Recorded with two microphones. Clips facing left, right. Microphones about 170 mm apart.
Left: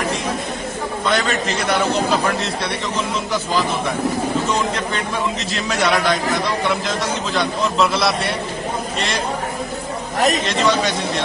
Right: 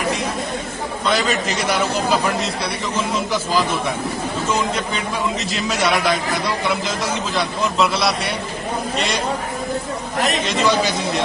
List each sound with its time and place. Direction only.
1.0 s a man's voice: centre (ahead or behind)
4.5 s a man's voice: centre (ahead or behind)
10.1 s speech: 40° left (ahead or behind)
10.4 s a man's voice: centre (ahead or behind)